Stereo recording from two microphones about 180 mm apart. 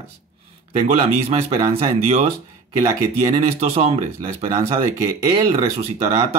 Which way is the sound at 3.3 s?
35° right (ahead or behind).